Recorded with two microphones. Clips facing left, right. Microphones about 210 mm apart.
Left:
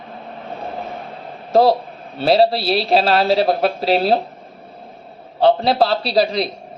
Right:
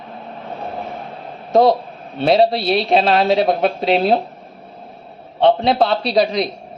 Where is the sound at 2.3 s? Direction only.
Centre (ahead or behind).